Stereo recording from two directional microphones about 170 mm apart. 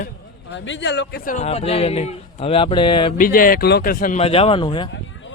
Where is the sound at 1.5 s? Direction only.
35° left (ahead or behind).